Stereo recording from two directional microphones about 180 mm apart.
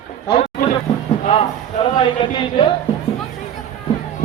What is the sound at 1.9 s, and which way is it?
Speech, 25° left (ahead or behind).